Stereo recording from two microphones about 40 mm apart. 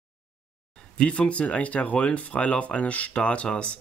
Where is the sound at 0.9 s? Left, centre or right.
Left.